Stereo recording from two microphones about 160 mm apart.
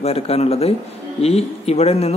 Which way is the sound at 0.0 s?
40° left (ahead or behind).